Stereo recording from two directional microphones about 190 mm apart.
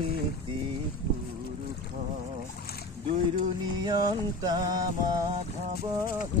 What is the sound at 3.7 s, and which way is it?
Music, 20° right (ahead or behind).